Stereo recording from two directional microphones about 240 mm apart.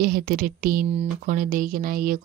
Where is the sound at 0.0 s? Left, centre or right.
Right.